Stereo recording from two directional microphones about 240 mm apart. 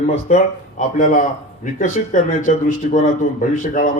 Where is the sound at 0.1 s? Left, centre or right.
Left.